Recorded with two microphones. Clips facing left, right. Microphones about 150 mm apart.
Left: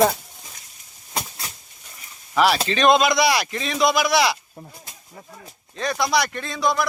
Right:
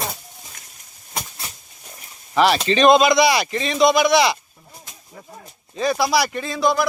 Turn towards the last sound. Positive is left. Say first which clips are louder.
# right 3 dB
turn(degrees=0)  # may be behind; listen again after turning